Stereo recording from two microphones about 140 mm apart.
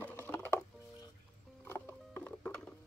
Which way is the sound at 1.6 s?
15° left (ahead or behind).